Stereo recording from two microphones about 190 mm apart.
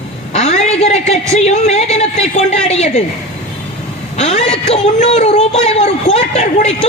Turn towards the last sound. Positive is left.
turn(degrees=35)  # may be behind; listen again after turning